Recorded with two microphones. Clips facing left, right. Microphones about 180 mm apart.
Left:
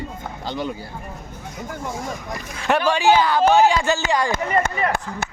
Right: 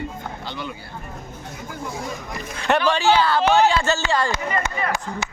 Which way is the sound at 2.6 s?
5° left (ahead or behind).